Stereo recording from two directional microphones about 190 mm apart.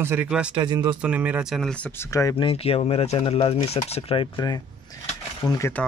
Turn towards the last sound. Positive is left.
turn(degrees=15)  # may be behind; listen again after turning